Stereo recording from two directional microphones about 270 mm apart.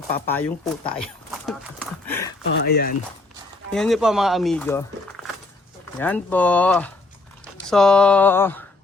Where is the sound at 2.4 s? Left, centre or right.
Left.